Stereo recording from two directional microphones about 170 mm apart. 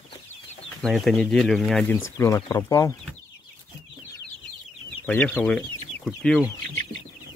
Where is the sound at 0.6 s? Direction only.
Centre (ahead or behind).